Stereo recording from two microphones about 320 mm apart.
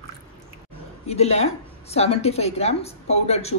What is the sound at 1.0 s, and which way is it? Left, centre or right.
A woman's voice, centre.